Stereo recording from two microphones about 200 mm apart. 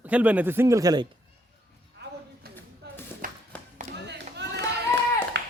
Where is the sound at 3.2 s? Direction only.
45° right (ahead or behind).